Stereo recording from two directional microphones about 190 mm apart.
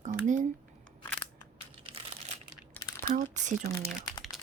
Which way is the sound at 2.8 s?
15° left (ahead or behind).